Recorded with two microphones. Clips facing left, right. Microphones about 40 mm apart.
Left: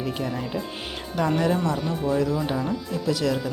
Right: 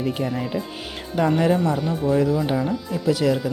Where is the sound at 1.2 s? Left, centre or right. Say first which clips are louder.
Right 4 dB; centre.